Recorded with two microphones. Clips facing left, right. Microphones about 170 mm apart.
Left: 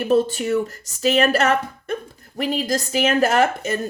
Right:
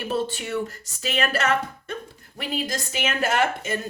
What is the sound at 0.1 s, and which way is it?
A woman's voice, 45° left (ahead or behind).